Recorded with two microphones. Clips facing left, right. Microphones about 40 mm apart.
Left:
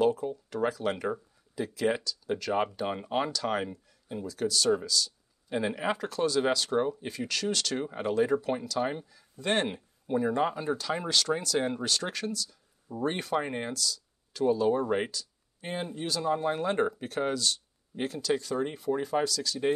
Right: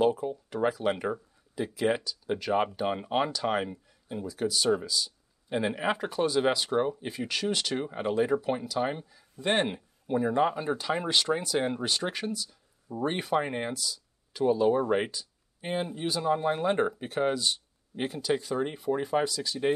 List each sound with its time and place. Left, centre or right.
0.0 s speech: centre